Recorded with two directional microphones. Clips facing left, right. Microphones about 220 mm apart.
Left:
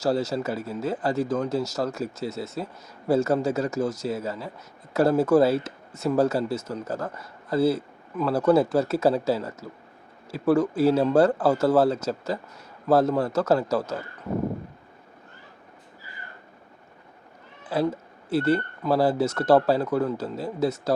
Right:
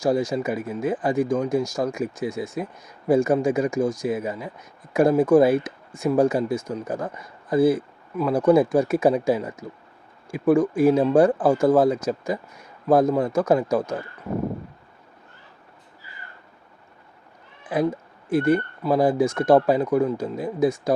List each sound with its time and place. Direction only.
0.0 s speech: 15° right (ahead or behind)
17.6 s cat: 15° right (ahead or behind)
18.3 s speech: 15° right (ahead or behind)